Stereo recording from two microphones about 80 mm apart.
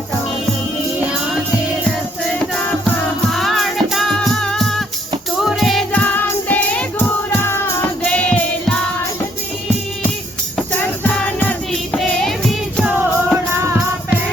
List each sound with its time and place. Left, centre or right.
3.3 s music: centre
5.9 s music: left
7.4 s music: left
8.0 s music: centre
10.7 s music: left
11.7 s music: centre
13.0 s music: right